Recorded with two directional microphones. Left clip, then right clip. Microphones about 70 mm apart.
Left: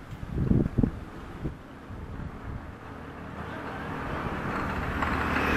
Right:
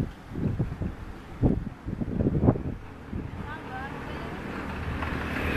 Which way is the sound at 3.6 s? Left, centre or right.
Left.